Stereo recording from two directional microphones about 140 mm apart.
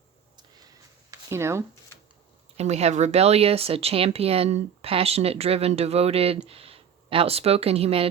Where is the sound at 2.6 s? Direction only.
50° right (ahead or behind).